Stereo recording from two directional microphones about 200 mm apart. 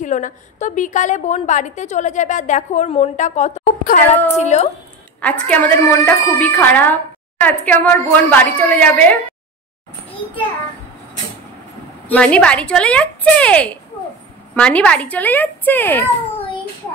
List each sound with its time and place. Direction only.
0.0 s a woman's voice: 40° left (ahead or behind)
5.2 s a woman's voice: 5° left (ahead or behind)
12.1 s a woman's voice: 5° left (ahead or behind)